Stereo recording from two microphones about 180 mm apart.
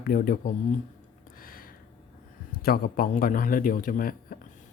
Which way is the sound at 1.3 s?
50° left (ahead or behind).